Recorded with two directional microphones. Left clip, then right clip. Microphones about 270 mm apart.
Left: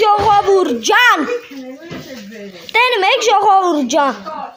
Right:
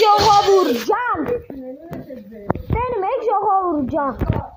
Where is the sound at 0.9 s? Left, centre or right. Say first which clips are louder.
Left 9 dB; left.